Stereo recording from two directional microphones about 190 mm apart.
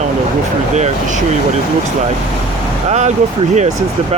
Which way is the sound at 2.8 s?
35° right (ahead or behind).